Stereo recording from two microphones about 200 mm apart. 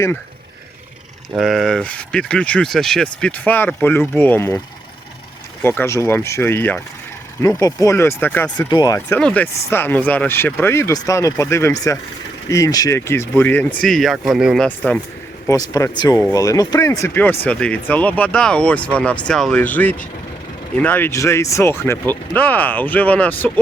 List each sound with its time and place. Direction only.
1.4 s speech: centre (ahead or behind)
5.6 s speech: 10° left (ahead or behind)
8.7 s speech: 20° left (ahead or behind); by 14.9 s centre (ahead or behind)
15.4 s speech: 15° left (ahead or behind)